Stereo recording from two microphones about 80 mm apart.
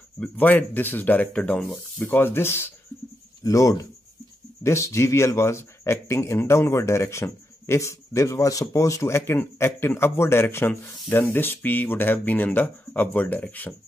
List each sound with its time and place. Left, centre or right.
0.2 s speech: left
2.0 s speech: left
3.4 s speech: left; by 13.7 s centre